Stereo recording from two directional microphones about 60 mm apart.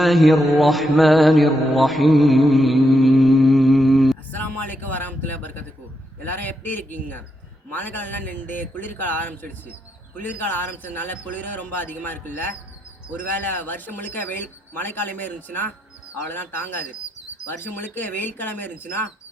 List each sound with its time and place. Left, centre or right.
0.0 s mantra: centre
4.3 s speech: left